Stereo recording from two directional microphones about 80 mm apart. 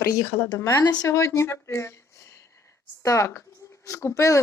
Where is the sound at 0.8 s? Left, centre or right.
Left.